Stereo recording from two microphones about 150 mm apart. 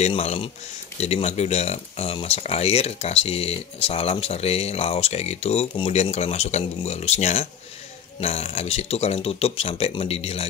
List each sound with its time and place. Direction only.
0.0 s speech: 45° left (ahead or behind)